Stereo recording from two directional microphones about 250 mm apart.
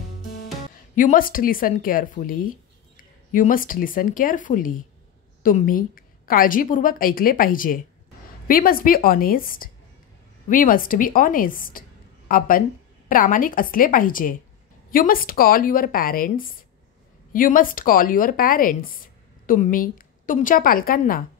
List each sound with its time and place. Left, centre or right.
0.9 s a woman's voice: left